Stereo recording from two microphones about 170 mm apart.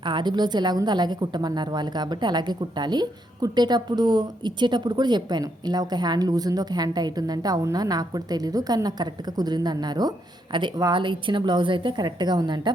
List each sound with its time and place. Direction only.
0.0 s a woman's voice: 25° right (ahead or behind)